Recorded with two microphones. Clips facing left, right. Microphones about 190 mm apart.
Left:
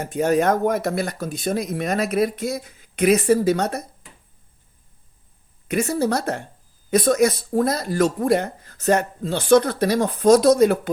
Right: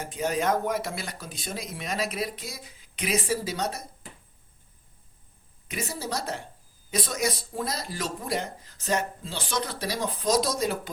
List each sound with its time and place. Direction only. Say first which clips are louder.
0.0 s speech: left 8 dB; 55° left (ahead or behind)
5.6 s speech: left 13 dB; 60° left (ahead or behind)